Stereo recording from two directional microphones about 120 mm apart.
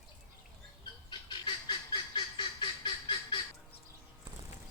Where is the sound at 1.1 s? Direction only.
45° left (ahead or behind).